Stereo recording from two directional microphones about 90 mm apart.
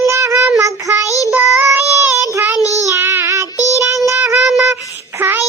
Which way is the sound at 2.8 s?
30° right (ahead or behind).